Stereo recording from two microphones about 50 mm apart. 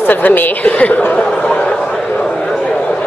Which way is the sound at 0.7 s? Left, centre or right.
Left.